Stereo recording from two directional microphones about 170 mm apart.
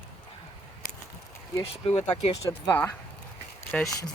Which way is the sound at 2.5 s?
20° left (ahead or behind).